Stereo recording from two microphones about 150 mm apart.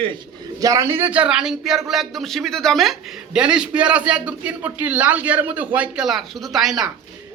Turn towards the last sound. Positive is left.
turn(degrees=-5)  # may be behind; listen again after turning